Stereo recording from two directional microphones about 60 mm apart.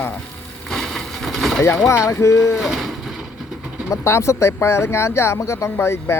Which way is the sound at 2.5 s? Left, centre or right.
Centre.